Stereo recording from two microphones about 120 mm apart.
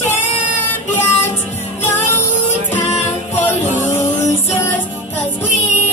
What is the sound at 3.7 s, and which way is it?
Vehicle, 20° left (ahead or behind).